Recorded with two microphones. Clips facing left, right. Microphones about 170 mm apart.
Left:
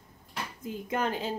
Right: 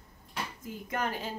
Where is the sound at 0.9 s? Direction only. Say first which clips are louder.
Left 3 dB; 25° left (ahead or behind).